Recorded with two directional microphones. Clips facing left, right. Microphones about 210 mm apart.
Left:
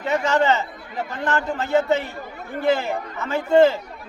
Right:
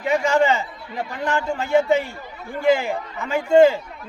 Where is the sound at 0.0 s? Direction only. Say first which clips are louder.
Right 2 dB; 10° right (ahead or behind).